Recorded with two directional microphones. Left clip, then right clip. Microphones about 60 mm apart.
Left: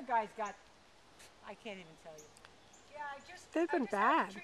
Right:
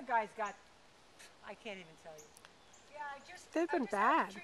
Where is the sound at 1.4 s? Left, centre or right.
Right.